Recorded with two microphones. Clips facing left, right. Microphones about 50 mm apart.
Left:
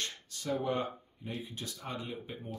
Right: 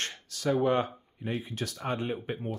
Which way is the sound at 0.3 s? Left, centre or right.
Right.